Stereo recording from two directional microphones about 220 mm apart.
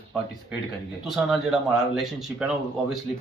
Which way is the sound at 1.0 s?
Centre (ahead or behind).